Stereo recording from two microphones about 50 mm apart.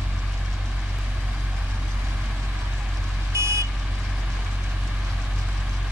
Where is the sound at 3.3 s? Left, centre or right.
Right.